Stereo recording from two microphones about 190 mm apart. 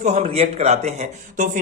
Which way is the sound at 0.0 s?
35° right (ahead or behind).